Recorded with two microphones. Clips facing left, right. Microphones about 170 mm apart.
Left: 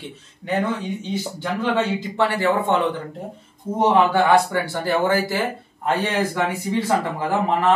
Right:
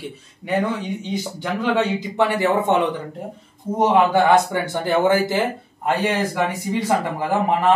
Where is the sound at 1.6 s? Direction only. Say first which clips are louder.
Right 1 dB; 15° right (ahead or behind).